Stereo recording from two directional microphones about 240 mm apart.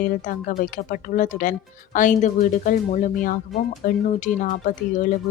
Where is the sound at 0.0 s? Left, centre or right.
Left.